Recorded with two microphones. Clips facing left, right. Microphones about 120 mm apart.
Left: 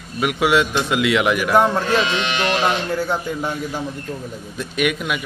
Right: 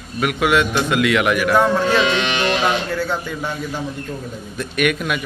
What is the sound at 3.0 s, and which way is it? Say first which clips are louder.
A man's voice: left 1 dB; 15° left (ahead or behind).